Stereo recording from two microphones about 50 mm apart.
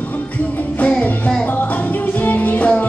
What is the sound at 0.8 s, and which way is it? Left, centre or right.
Music, left.